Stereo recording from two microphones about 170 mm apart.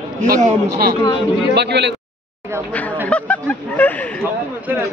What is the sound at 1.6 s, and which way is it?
Speech, 85° right.